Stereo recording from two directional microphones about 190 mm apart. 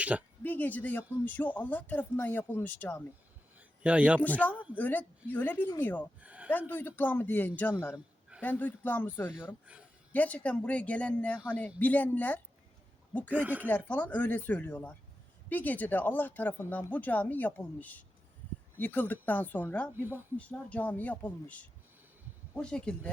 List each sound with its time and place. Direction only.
0.0 s speech: 5° right (ahead or behind)
0.4 s speech: 10° left (ahead or behind)
3.6 s a sound: 5° right (ahead or behind)
4.2 s speech: 10° left (ahead or behind)
4.5 s speech: 5° right (ahead or behind)
4.8 s speech: 10° left (ahead or behind)
6.1 s speech: 5° right (ahead or behind)
6.7 s speech: 10° left (ahead or behind)
13.3 s speech: 10° right (ahead or behind)
13.7 s speech: 10° left (ahead or behind)
19.9 s speech: 10° right (ahead or behind)
20.3 s speech: 5° left (ahead or behind)